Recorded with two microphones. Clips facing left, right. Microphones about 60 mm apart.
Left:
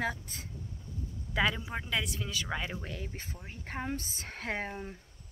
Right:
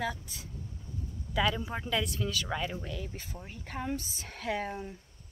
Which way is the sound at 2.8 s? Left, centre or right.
Left.